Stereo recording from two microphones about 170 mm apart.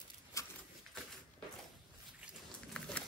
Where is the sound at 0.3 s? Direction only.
20° left (ahead or behind).